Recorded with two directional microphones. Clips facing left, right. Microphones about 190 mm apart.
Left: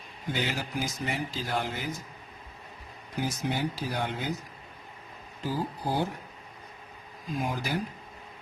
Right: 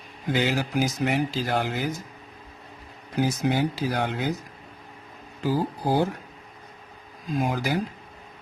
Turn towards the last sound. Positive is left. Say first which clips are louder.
# right 6 dB
turn(degrees=-90)